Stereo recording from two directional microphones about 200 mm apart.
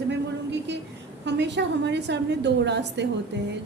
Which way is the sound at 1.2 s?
60° right (ahead or behind).